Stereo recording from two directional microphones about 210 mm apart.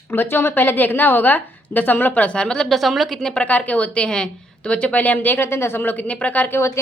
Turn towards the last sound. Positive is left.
turn(degrees=10)  # may be behind; listen again after turning